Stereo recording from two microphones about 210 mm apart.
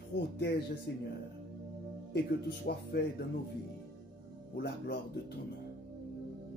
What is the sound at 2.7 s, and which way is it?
Speech, 50° left (ahead or behind).